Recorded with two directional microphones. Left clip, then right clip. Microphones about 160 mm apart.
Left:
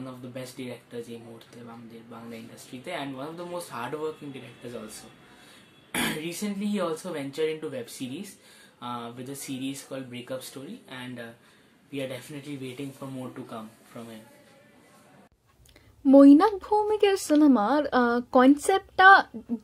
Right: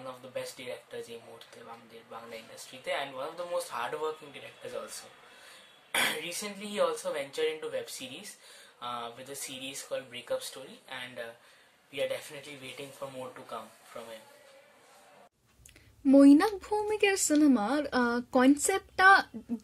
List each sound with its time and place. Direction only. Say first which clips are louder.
0.0 s speech: even; 5° right (ahead or behind)
2.0 s speech: right 1 dB; centre (ahead or behind)
5.9 s speech: even; 5° right (ahead or behind)
13.9 s speech: even; centre (ahead or behind)
16.1 s a woman's voice: left 5 dB; 15° right (ahead or behind)